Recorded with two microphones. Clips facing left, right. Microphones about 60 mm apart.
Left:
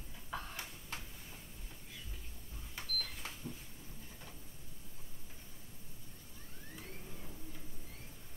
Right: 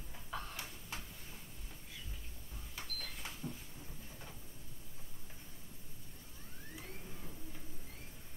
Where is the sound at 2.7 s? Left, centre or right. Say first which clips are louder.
Left 4 dB; centre.